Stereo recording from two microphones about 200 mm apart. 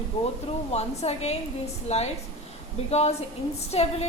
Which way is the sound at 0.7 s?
30° left (ahead or behind).